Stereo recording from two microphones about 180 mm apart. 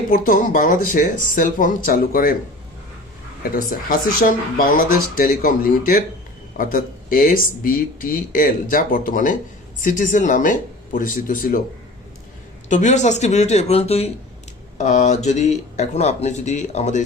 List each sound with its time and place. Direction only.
0.1 s speech: 50° left (ahead or behind)
3.5 s speech: 55° left (ahead or behind)
12.6 s speech: 40° left (ahead or behind)